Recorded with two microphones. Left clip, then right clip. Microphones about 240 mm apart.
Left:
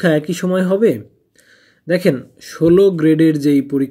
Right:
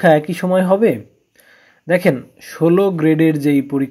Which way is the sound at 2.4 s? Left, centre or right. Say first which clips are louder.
Left 4 dB; centre.